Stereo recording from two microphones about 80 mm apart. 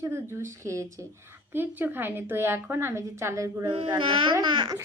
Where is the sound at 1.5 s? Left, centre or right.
Right.